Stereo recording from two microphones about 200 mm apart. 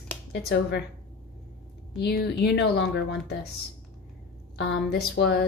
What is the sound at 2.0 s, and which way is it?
Speech, 55° left (ahead or behind).